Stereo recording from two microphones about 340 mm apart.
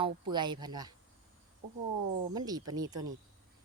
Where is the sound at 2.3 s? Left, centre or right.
Centre.